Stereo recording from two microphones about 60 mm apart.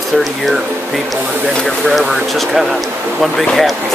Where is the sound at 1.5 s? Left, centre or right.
Centre.